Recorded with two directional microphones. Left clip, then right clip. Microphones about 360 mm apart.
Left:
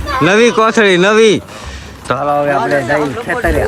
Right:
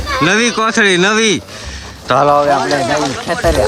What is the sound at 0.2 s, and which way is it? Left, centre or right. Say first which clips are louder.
Speech: left 4 dB; centre.